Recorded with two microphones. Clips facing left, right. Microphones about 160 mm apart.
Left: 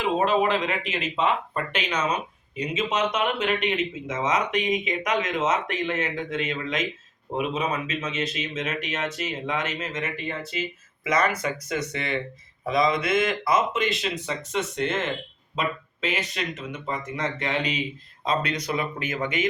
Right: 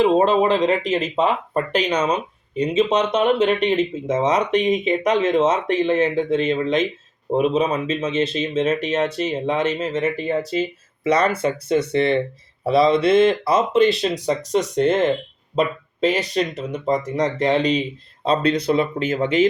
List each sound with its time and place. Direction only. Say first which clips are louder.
0.0 s speech: right 7 dB; 35° right (ahead or behind)